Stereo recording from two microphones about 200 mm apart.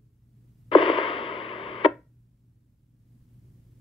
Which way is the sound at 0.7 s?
25° left (ahead or behind).